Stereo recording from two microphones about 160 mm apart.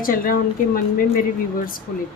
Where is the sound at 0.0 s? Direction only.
60° left (ahead or behind).